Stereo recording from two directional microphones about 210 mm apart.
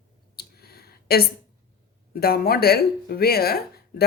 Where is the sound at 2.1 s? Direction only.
45° left (ahead or behind).